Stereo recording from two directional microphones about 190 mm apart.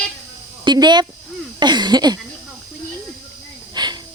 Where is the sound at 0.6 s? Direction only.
20° right (ahead or behind).